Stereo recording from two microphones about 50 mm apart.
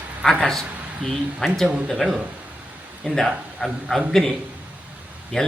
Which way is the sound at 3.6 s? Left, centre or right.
Centre.